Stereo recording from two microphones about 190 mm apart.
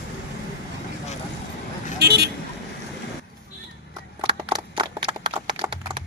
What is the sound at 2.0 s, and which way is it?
Vehicle, 60° right (ahead or behind).